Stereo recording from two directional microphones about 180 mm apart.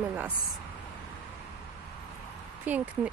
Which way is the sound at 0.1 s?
10° right (ahead or behind).